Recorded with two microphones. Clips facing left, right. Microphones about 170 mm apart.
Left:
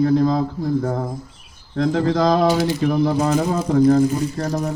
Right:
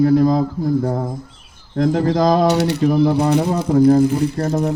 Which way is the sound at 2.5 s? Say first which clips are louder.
Right 2 dB; 70° right (ahead or behind).